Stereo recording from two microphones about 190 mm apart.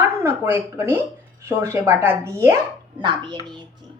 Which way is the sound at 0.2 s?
10° right (ahead or behind).